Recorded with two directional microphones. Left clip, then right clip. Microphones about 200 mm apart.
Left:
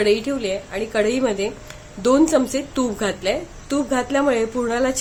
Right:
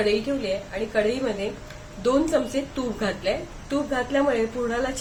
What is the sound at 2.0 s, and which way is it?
A woman's voice, 55° left (ahead or behind).